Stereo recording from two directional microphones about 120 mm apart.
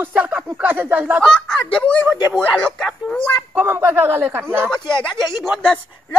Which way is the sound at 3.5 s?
20° right (ahead or behind).